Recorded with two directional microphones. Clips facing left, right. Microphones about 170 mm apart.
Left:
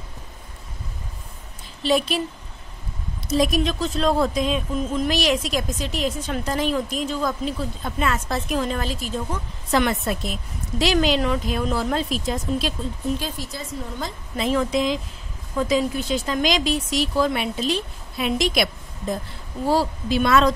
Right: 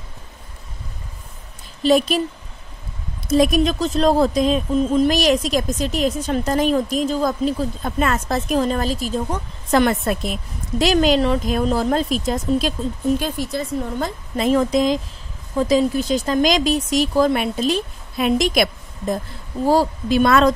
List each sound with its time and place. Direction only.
1.8 s speech: 45° right (ahead or behind)
3.3 s speech: 50° right (ahead or behind)
11.1 s speech: 35° right (ahead or behind)
13.2 s speech: 55° right (ahead or behind)